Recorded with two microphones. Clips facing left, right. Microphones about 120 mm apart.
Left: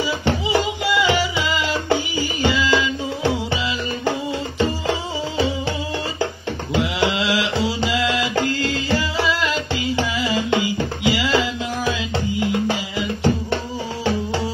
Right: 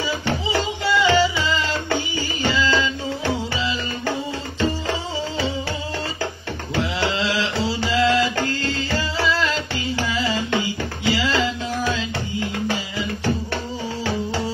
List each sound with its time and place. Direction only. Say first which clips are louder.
0.2 s music: left 3 dB; 20° left (ahead or behind)
6.7 s mantra: left 3 dB; 15° left (ahead or behind)
11.1 s music: left 1 dB; 15° left (ahead or behind)